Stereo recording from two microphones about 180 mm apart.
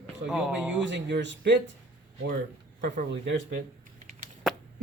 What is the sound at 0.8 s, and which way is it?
Speech, 80° right.